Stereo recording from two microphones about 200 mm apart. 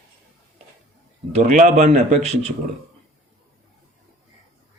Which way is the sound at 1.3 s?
40° right (ahead or behind).